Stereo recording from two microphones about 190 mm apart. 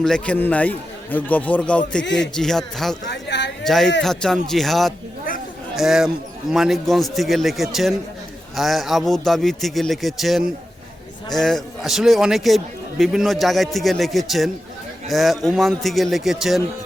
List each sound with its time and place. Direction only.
0.0 s a man's voice: 5° left (ahead or behind)
3.1 s speech: 65° left (ahead or behind)
3.6 s a man's voice: centre (ahead or behind)